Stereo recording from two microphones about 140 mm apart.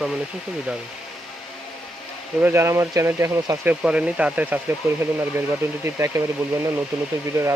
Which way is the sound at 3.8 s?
5° right (ahead or behind).